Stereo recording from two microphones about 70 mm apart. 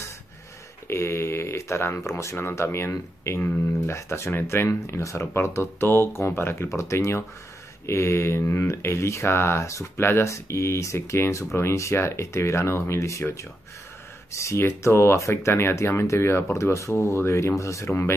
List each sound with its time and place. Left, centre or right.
0.8 s speech: left
4.6 s speech: left